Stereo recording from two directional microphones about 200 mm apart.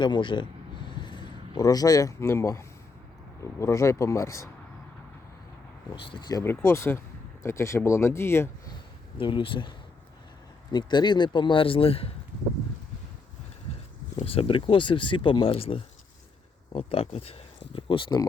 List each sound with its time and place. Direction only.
0.0 s speech: 25° left (ahead or behind)
0.9 s a sound: 25° left (ahead or behind)
3.6 s speech: 15° left (ahead or behind)
6.1 s speech: 20° left (ahead or behind)
9.1 s speech: 25° left (ahead or behind)
14.2 s speech: 30° left (ahead or behind)